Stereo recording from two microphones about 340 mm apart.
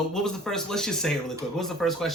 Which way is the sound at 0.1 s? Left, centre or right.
Centre.